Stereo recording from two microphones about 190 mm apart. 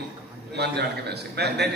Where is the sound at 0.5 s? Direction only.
60° right (ahead or behind).